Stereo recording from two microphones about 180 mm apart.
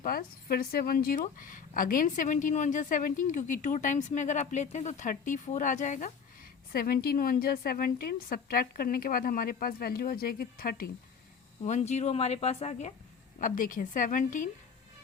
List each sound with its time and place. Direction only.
0.0 s speech: 55° left (ahead or behind)
6.7 s a woman's voice: 55° left (ahead or behind)
11.6 s speech: 40° left (ahead or behind)
13.4 s speech: 50° left (ahead or behind)